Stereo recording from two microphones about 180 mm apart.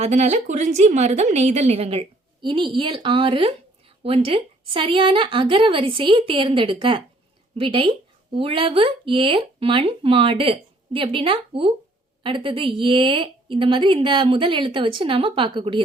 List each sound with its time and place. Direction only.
0.0 s a woman's voice: 40° right (ahead or behind)